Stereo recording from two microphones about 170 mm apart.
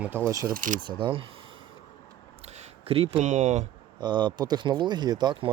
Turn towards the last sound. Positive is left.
turn(degrees=-25)  # may be behind; listen again after turning